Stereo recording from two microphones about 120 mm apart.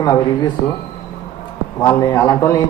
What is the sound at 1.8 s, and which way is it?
Speech, 25° left (ahead or behind).